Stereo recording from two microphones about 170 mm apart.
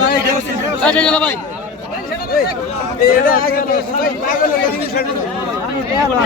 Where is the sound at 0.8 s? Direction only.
5° left (ahead or behind).